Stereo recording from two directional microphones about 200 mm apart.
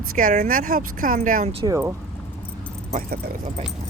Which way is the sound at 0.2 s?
45° right (ahead or behind).